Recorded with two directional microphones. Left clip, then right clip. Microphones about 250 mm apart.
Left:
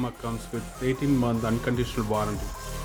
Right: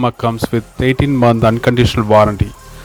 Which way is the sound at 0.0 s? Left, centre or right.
Right.